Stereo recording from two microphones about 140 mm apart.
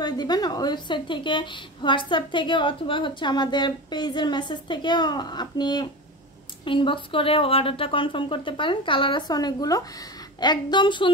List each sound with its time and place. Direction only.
0.0 s a woman's voice: 30° left (ahead or behind)